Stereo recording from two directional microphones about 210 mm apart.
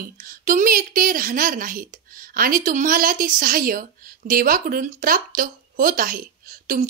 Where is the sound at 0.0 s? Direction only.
40° right (ahead or behind).